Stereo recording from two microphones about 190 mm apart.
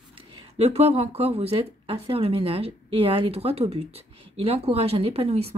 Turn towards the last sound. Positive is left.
turn(degrees=-35)  # may be behind; listen again after turning